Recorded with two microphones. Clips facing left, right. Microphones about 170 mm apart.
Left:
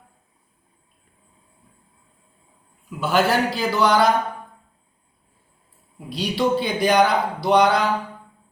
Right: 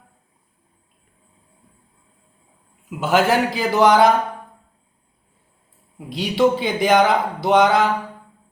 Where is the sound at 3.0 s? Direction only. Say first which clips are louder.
Right 2 dB; 20° right (ahead or behind).